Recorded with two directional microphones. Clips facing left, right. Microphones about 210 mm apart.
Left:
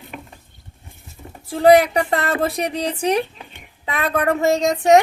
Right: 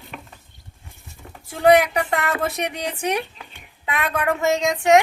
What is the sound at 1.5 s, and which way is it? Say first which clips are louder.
Speech: left 3 dB; 35° left (ahead or behind).